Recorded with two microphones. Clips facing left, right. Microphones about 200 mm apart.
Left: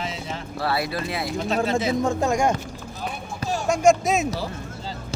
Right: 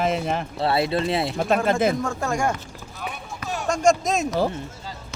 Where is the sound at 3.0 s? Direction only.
30° left (ahead or behind).